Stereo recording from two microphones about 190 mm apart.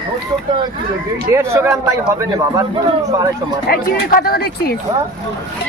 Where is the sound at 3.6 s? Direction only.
50° left (ahead or behind).